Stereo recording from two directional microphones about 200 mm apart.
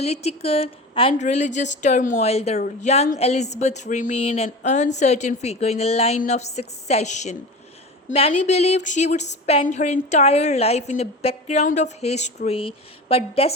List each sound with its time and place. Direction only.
0.0 s speech: 30° left (ahead or behind)